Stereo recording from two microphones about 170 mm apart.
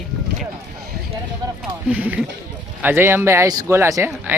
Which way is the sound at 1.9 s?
10° right (ahead or behind).